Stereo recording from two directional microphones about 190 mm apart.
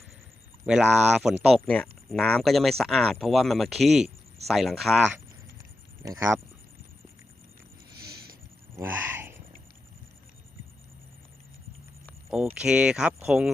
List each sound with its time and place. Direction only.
0.6 s speech: 5° right (ahead or behind)
6.0 s speech: 15° right (ahead or behind)
8.7 s a sound: 10° right (ahead or behind)
12.5 s speech: 5° right (ahead or behind)